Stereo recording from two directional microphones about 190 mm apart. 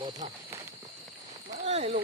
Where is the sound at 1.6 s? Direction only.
35° right (ahead or behind).